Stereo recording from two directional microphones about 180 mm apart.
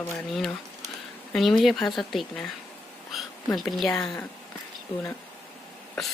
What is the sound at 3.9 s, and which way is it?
Speech, 20° left (ahead or behind).